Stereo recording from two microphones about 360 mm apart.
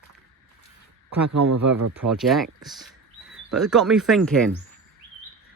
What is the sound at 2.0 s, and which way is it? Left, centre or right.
Speech, centre.